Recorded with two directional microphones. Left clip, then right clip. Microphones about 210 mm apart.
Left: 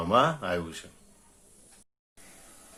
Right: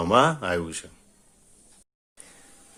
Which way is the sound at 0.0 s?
35° right (ahead or behind).